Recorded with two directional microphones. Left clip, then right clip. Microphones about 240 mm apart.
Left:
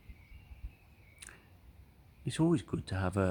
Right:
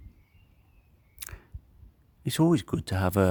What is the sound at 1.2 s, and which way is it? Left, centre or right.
Scissors, right.